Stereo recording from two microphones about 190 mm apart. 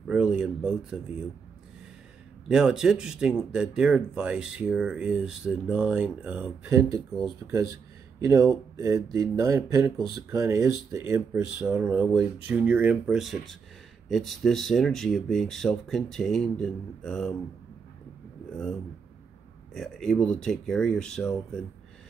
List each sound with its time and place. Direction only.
0.0 s speech: 5° right (ahead or behind)
2.4 s speech: 5° right (ahead or behind)
7.7 s a sound: 15° right (ahead or behind)
8.7 s speech: 15° right (ahead or behind); by 17.3 s 5° left (ahead or behind)
19.7 s speech: centre (ahead or behind)